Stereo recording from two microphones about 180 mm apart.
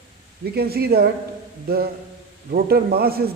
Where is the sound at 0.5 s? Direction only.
60° right (ahead or behind).